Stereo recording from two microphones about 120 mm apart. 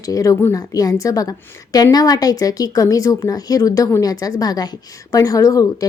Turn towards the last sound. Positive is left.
turn(degrees=30)  # may be behind; listen again after turning